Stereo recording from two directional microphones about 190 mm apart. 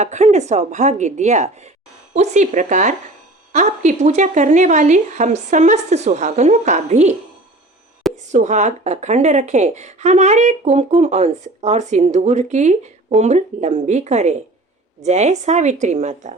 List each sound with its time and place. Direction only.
0.0 s speech: 35° right (ahead or behind)